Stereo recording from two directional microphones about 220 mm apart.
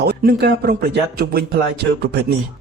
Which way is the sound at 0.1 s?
45° right (ahead or behind).